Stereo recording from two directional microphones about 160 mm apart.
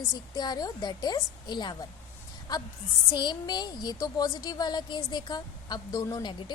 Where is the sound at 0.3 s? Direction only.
25° left (ahead or behind).